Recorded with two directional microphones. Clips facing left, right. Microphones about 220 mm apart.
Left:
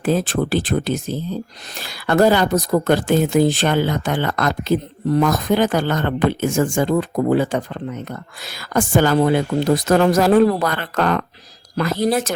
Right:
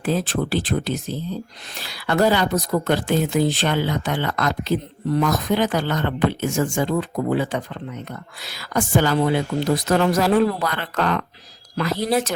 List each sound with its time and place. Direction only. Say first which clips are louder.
0.0 s speech: left 3 dB; 50° left (ahead or behind)